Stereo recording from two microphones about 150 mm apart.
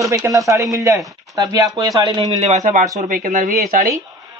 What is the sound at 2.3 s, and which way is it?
Speech, 50° right (ahead or behind).